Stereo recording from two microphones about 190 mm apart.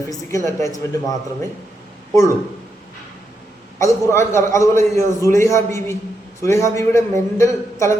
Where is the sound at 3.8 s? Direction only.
15° left (ahead or behind).